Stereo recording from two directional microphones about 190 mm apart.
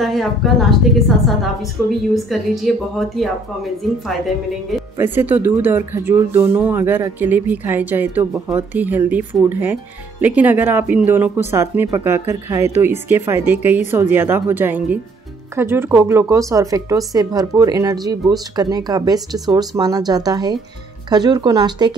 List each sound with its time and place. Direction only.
0.0 s a woman's voice: centre (ahead or behind)
4.9 s speech: 10° right (ahead or behind)